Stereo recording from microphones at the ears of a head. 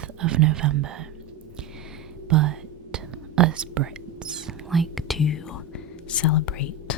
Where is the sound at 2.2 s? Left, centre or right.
Right.